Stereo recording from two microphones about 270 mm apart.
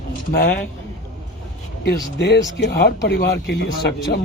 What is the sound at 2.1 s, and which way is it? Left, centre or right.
Speech, left.